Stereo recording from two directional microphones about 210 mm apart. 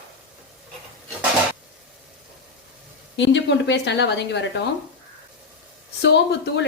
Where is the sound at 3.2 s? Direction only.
60° left (ahead or behind).